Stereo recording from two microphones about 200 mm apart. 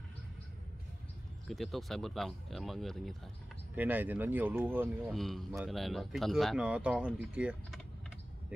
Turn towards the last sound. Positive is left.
turn(degrees=-5)  # may be behind; listen again after turning